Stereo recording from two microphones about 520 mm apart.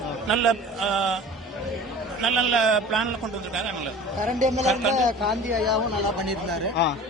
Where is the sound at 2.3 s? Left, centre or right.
Right.